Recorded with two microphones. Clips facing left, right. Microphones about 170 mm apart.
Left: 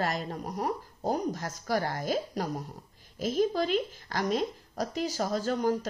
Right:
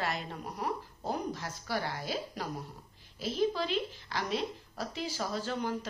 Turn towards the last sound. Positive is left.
turn(degrees=40)  # may be behind; listen again after turning